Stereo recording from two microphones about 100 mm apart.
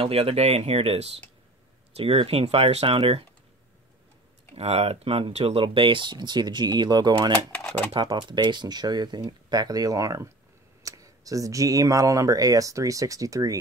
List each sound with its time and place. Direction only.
0.0 s speech: 75° right (ahead or behind)
4.6 s speech: 90° right; by 7.3 s 45° right (ahead or behind)
7.5 s a sound: 15° left (ahead or behind)
7.9 s speech: 50° right (ahead or behind)